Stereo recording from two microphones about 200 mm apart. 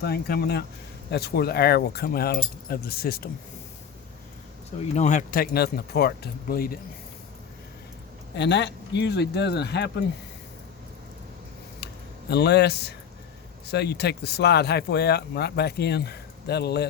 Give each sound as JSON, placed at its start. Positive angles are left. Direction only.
{"t": 0.0, "sound": "speech", "side_deg": 50}
{"t": 4.9, "sound": "speech", "side_deg": 35}
{"t": 8.4, "sound": "speech", "side_deg": 60}
{"t": 11.8, "sound": "a sound", "side_deg": 55}
{"t": 12.3, "sound": "speech", "side_deg": 55}